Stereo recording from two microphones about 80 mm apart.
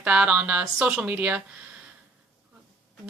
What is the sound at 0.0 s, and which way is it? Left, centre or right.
Speech, centre.